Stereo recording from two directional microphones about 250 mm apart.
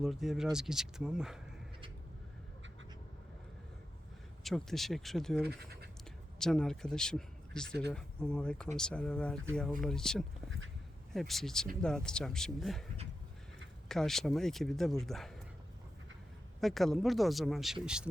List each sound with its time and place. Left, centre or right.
0.0 s speech: centre
4.4 s speech: centre
5.4 s speech: right
6.4 s speech: centre
13.8 s speech: centre
16.6 s speech: centre